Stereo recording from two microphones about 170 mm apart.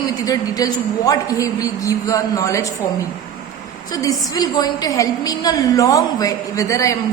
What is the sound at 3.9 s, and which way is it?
A woman's voice, 20° left (ahead or behind).